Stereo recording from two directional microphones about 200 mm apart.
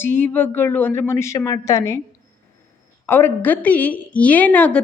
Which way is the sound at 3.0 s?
10° left (ahead or behind).